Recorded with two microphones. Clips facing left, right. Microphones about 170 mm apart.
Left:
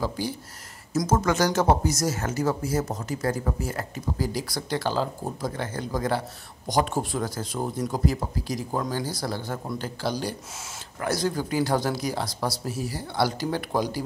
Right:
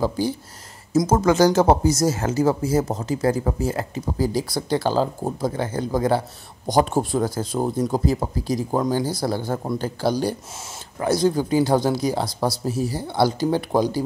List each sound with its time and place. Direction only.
0.9 s speech: 30° right (ahead or behind)
11.0 s speech: 25° right (ahead or behind)